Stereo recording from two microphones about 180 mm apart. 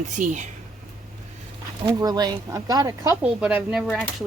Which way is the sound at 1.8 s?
20° right (ahead or behind).